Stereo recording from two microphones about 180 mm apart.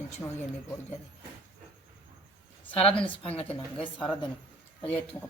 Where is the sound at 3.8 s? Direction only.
5° left (ahead or behind).